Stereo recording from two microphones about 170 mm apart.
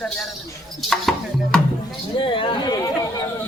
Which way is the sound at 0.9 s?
Centre (ahead or behind).